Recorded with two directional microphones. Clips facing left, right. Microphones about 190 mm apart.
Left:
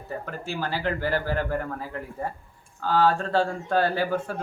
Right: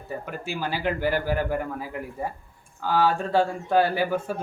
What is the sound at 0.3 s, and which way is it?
Speech, 15° right (ahead or behind).